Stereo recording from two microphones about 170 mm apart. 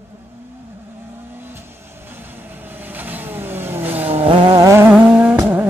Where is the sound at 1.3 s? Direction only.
10° right (ahead or behind).